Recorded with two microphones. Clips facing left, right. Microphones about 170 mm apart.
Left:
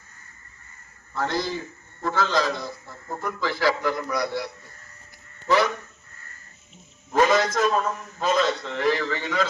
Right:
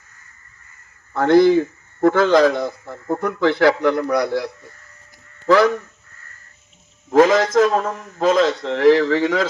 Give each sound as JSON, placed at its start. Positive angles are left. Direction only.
{"t": 1.1, "sound": "a man's voice", "side_deg": -55}
{"t": 7.1, "sound": "a man's voice", "side_deg": -90}